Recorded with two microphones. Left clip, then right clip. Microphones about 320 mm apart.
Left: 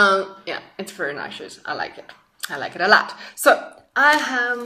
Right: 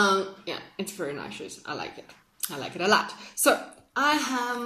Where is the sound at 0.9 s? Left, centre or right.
Left.